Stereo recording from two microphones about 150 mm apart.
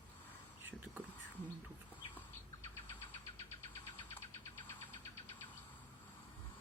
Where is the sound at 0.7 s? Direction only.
10° right (ahead or behind).